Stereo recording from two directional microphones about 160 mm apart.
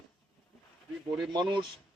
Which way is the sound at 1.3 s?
25° right (ahead or behind).